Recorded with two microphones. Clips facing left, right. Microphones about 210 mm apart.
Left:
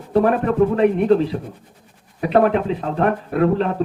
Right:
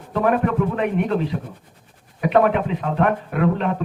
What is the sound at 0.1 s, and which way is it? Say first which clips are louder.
Speech: left 3 dB; 35° left (ahead or behind).